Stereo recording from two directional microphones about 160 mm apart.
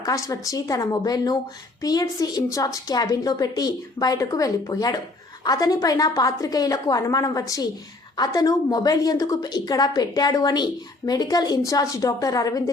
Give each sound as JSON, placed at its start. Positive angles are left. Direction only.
{"t": 0.0, "sound": "a woman's voice", "side_deg": 20}